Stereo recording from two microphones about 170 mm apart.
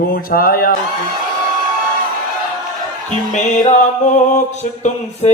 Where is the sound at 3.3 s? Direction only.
40° left (ahead or behind).